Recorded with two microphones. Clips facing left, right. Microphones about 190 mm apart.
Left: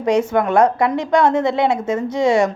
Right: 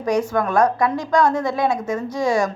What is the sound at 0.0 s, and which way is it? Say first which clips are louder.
A woman's voice: left 3 dB; 25° left (ahead or behind).